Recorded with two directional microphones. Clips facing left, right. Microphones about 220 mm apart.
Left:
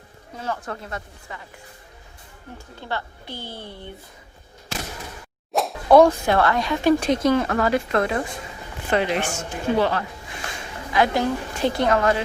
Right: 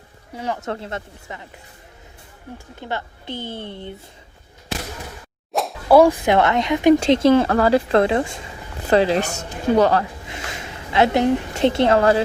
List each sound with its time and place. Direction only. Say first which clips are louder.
0.3 s speech: right 3 dB; 15° right (ahead or behind)
0.7 s speech: right 5 dB; 25° right (ahead or behind)
2.8 s speech: right 2 dB; 20° right (ahead or behind)
5.5 s a woman's voice: right 1 dB; 5° right (ahead or behind); by 10.0 s 40° right (ahead or behind)
10.2 s speech: right 2 dB; 25° right (ahead or behind)